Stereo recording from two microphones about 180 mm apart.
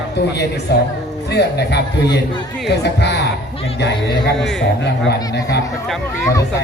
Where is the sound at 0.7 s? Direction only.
70° left (ahead or behind).